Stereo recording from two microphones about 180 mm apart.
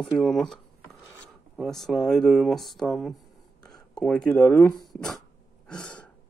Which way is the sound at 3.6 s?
20° left (ahead or behind).